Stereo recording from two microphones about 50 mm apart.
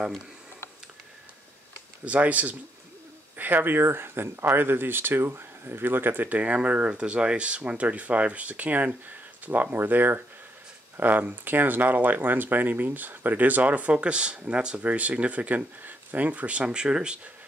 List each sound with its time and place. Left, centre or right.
2.0 s speech: right
3.3 s speech: right; by 17.2 s centre